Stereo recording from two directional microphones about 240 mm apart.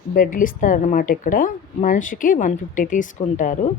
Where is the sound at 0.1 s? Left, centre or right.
Left.